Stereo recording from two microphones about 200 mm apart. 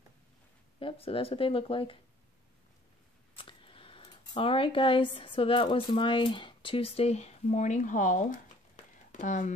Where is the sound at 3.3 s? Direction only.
25° left (ahead or behind).